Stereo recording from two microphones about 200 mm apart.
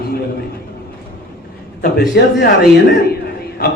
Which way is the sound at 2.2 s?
55° left (ahead or behind).